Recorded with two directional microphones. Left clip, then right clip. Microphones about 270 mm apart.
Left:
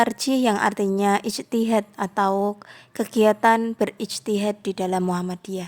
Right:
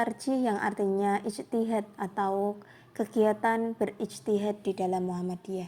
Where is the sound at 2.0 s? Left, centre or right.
Left.